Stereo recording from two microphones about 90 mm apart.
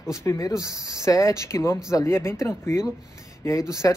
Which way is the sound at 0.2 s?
30° left (ahead or behind).